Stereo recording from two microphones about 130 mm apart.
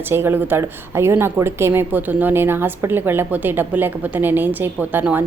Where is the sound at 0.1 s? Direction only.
15° right (ahead or behind).